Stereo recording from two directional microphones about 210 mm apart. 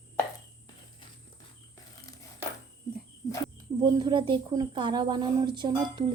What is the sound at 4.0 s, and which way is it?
Speech, 20° right (ahead or behind).